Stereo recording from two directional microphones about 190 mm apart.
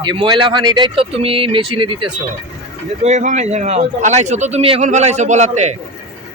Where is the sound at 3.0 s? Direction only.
40° right (ahead or behind).